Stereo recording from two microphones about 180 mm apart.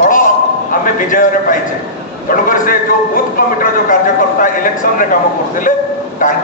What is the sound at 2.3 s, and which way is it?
A man's voice, 50° left (ahead or behind).